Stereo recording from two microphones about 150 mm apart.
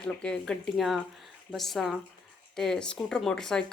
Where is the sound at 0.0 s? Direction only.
5° left (ahead or behind).